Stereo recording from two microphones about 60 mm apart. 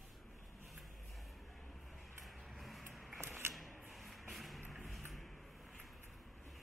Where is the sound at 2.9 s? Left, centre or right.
Centre.